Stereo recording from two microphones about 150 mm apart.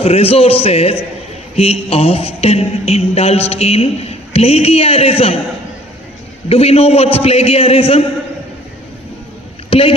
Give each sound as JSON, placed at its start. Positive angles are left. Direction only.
{"t": 0.0, "sound": "speech", "side_deg": 40}
{"t": 6.5, "sound": "speech", "side_deg": 40}
{"t": 9.6, "sound": "a man's voice", "side_deg": 35}